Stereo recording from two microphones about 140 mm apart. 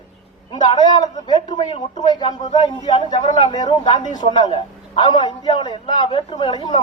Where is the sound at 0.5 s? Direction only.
30° left (ahead or behind).